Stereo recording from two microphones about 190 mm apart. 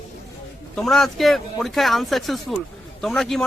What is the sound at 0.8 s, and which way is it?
A man's voice, centre (ahead or behind).